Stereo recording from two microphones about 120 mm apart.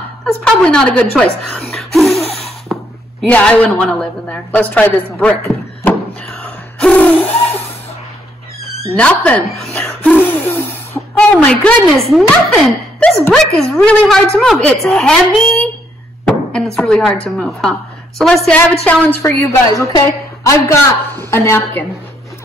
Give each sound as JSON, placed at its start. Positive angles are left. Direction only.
{"t": 0.2, "sound": "a woman's voice", "side_deg": 5}
{"t": 1.7, "sound": "laughter", "side_deg": 0}
{"t": 2.4, "sound": "a sound", "side_deg": 0}
{"t": 3.3, "sound": "a woman's voice", "side_deg": 10}
{"t": 6.2, "sound": "a sound", "side_deg": 10}
{"t": 8.9, "sound": "a woman's voice", "side_deg": 10}
{"t": 11.1, "sound": "a woman's voice", "side_deg": 5}
{"t": 16.3, "sound": "speech", "side_deg": 5}
{"t": 18.9, "sound": "a woman's voice", "side_deg": 15}